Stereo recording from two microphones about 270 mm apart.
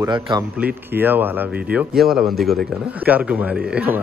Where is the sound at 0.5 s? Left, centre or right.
Centre.